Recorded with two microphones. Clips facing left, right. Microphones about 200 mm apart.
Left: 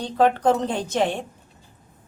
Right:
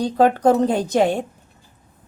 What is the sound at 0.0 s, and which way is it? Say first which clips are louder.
A woman's voice: right 4 dB; 40° right (ahead or behind).